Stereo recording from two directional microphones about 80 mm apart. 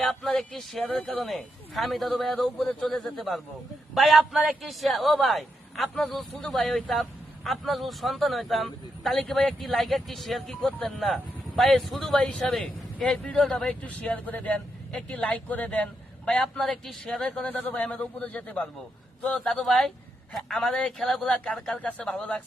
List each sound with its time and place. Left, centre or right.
0.0 s speech: centre
1.2 s a man's voice: centre
13.8 s speech: centre
19.5 s a man's voice: centre